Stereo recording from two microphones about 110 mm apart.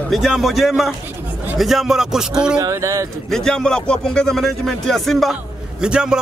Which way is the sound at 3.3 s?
5° left (ahead or behind).